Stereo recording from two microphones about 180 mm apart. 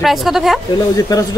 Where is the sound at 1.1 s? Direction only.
20° left (ahead or behind).